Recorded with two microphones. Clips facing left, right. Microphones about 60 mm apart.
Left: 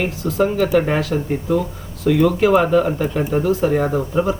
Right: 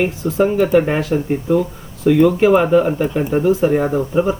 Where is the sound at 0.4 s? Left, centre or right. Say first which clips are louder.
Right 3 dB; centre.